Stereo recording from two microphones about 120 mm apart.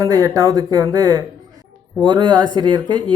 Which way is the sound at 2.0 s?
40° right (ahead or behind).